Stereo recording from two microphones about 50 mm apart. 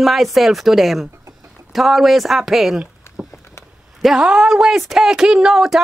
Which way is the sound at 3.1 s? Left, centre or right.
Left.